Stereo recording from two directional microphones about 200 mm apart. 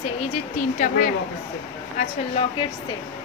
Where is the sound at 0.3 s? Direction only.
40° left (ahead or behind).